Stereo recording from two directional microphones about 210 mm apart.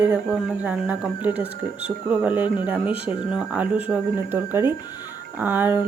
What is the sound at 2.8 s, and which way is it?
Speech, 25° left (ahead or behind).